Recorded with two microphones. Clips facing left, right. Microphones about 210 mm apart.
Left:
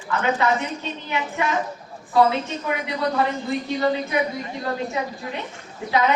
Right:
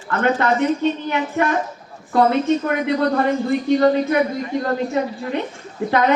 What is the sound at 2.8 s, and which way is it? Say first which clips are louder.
Speech: right 4 dB; 55° right (ahead or behind).